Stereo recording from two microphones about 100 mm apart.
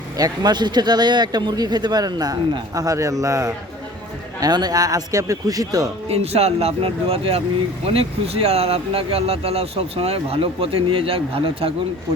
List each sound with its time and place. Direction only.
0.2 s a man's voice: 45° right (ahead or behind)
6.1 s speech: 90° right; by 7.4 s 75° right (ahead or behind)
7.9 s speech: 85° right; by 11.7 s 65° right (ahead or behind)